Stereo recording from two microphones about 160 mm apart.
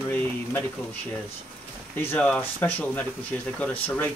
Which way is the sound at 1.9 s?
10° left (ahead or behind).